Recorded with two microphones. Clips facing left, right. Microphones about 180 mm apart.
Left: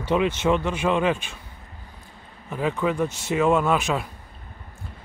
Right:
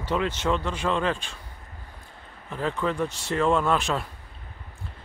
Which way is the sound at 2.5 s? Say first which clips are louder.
Left 3 dB; 10° left (ahead or behind).